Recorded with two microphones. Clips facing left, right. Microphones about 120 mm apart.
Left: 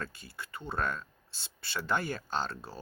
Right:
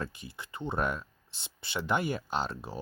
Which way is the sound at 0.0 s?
20° right (ahead or behind).